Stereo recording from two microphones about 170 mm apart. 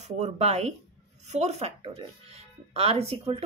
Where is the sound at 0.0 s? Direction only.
40° right (ahead or behind).